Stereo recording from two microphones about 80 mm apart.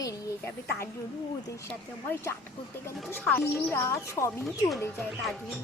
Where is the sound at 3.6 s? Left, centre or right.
Left.